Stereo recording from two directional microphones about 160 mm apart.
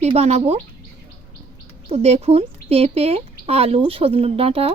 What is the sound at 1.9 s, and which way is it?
Speech, 40° right (ahead or behind).